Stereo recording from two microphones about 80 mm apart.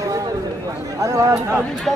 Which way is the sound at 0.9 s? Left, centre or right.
Right.